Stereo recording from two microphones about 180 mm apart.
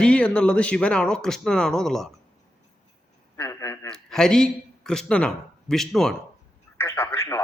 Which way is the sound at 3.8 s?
5° left (ahead or behind).